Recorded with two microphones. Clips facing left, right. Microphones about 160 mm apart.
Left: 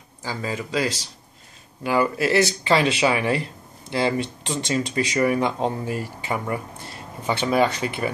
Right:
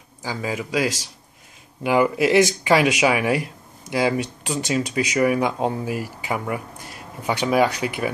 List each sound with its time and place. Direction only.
0.2 s speech: 10° right (ahead or behind)